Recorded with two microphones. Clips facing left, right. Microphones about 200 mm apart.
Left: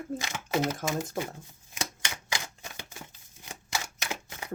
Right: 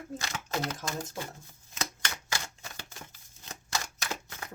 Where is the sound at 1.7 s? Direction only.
15° left (ahead or behind).